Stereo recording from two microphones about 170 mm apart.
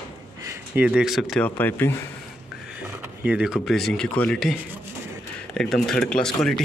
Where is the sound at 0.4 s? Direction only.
15° right (ahead or behind).